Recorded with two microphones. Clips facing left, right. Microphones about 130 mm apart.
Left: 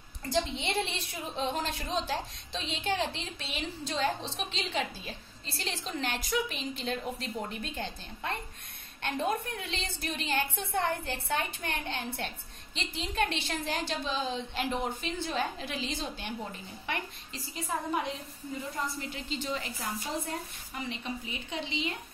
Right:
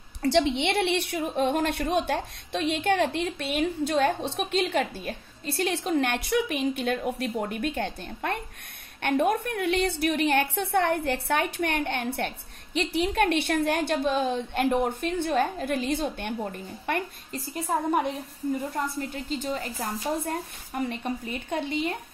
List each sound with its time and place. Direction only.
0.2 s a woman's voice: 75° right (ahead or behind); by 21.9 s 50° right (ahead or behind)